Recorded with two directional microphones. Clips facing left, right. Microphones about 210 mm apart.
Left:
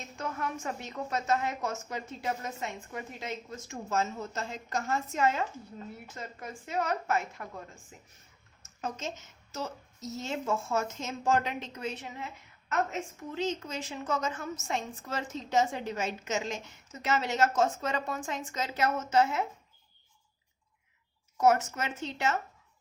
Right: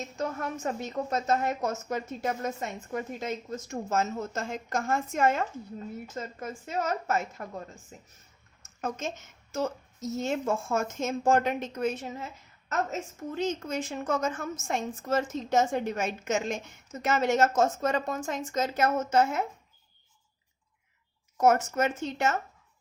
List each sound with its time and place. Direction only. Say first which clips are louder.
0.2 s a woman's voice: right 3 dB; 45° right (ahead or behind)
6.4 s a woman's voice: right 1 dB; 45° right (ahead or behind)
8.8 s a woman's voice: right 3 dB; 50° right (ahead or behind)
21.4 s a woman's voice: right 3 dB; 50° right (ahead or behind)